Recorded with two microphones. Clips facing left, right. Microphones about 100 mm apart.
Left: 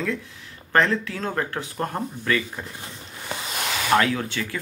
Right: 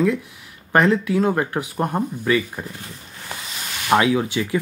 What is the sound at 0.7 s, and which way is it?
Speech, 15° right (ahead or behind).